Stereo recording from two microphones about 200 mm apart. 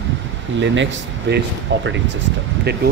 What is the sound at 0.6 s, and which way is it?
A man's voice, 65° right (ahead or behind).